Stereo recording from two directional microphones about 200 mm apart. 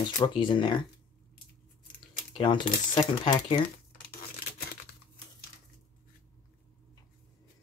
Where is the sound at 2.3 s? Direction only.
20° left (ahead or behind).